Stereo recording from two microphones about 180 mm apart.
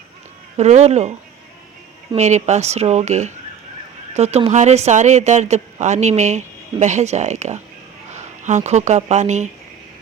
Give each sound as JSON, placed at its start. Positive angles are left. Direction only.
{"t": 0.5, "sound": "a woman's voice", "side_deg": -40}
{"t": 2.1, "sound": "a woman's voice", "side_deg": -40}